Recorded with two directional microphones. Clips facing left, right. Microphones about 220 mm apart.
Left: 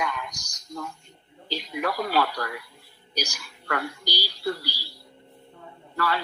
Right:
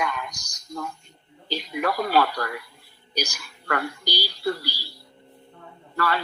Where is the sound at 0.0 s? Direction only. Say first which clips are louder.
Right 2 dB; 55° right (ahead or behind).